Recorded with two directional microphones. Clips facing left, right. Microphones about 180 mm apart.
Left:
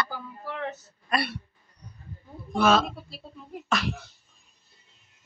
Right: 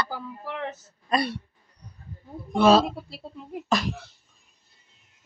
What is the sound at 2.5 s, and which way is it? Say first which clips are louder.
Speech: right 4 dB; 30° right (ahead or behind).